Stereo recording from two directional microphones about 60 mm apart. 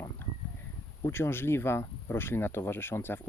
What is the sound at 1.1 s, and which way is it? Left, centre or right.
Speech, left.